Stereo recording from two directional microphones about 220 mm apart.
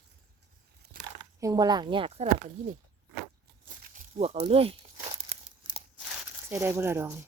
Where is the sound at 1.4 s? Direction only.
15° right (ahead or behind).